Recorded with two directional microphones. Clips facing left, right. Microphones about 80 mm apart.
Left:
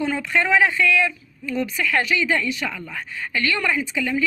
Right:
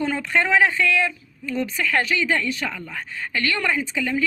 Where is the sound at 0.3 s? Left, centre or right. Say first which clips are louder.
Even; right.